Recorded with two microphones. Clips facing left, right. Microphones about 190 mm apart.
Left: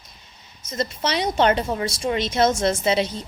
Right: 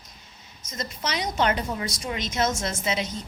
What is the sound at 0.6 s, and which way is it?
A woman's voice, 30° left (ahead or behind).